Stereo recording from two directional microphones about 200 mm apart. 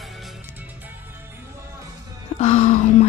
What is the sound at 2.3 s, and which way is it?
Music, 35° left (ahead or behind).